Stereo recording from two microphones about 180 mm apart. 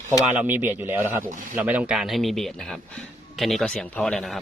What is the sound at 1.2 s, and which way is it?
Speech, 45° right (ahead or behind).